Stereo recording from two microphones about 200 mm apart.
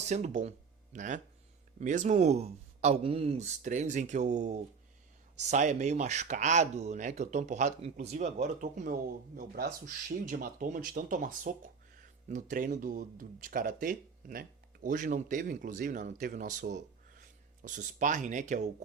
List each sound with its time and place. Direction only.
0.0 s speech: 35° right (ahead or behind)